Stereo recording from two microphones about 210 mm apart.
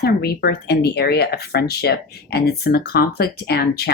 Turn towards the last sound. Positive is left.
turn(degrees=45)  # may be behind; listen again after turning